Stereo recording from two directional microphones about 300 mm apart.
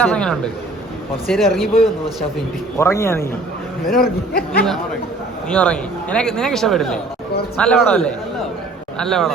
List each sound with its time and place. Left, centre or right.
0.0 s a man's voice: centre
4.0 s speech: left
5.5 s a man's voice: centre